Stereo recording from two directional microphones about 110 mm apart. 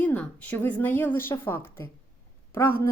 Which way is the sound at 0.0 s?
15° left (ahead or behind).